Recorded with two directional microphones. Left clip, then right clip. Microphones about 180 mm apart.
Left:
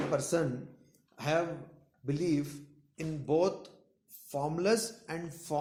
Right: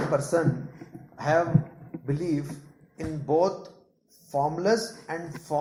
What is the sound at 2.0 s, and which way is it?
Speech, 45° left (ahead or behind).